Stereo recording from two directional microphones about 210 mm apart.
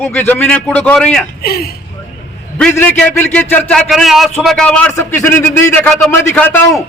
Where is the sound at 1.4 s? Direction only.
45° left (ahead or behind).